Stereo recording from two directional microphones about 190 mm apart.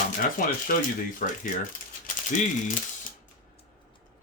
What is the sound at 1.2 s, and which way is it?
Speech, 45° left (ahead or behind).